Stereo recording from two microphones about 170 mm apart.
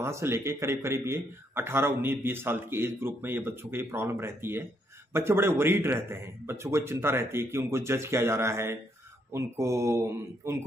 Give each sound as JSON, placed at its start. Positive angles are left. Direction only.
{"t": 0.0, "sound": "speech", "side_deg": -15}